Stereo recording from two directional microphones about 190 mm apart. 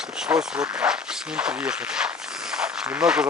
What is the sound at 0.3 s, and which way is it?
Speech, 10° right (ahead or behind).